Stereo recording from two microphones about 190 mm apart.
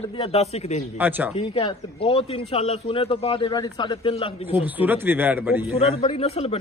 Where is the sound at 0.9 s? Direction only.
10° right (ahead or behind).